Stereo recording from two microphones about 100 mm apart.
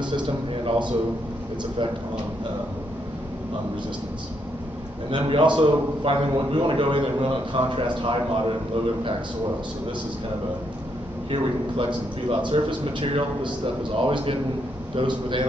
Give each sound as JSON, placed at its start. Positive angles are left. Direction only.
{"t": 0.7, "sound": "a man's voice", "side_deg": -50}
{"t": 5.1, "sound": "a man's voice", "side_deg": -55}
{"t": 11.2, "sound": "a man's voice", "side_deg": -65}
{"t": 12.4, "sound": "a man's voice", "side_deg": -50}